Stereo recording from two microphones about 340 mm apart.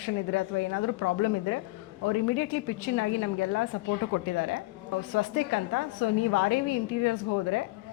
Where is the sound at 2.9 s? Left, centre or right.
Left.